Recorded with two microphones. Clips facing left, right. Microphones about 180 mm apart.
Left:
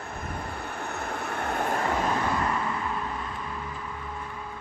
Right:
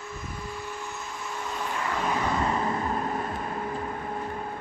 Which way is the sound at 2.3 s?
30° right (ahead or behind).